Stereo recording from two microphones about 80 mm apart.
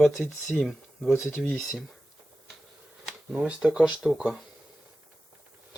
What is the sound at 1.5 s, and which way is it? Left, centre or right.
Speech, centre.